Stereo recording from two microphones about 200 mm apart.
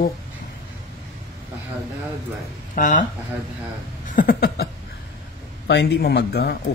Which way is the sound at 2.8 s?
40° left (ahead or behind).